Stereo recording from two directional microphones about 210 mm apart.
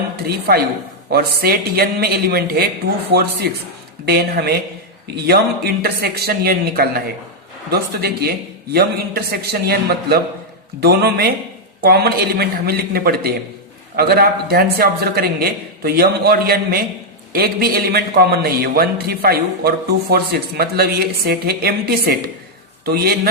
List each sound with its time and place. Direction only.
0.3 s a man's voice: 50° right (ahead or behind)